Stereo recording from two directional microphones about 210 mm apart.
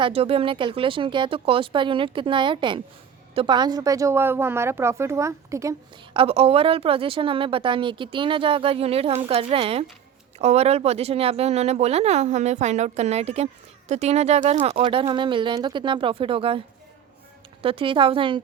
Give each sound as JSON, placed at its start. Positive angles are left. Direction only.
{"t": 0.0, "sound": "a woman's voice", "side_deg": -25}
{"t": 6.1, "sound": "speech", "side_deg": -30}